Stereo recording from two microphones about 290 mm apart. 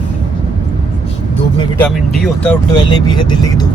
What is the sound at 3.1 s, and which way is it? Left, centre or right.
Speech, centre.